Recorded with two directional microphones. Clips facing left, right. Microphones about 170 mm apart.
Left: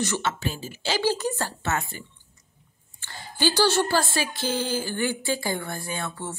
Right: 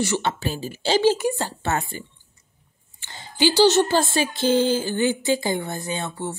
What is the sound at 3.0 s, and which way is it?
Speech, 15° right (ahead or behind).